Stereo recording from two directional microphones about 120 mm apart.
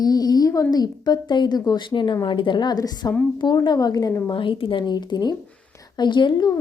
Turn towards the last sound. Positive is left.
turn(degrees=35)  # may be behind; listen again after turning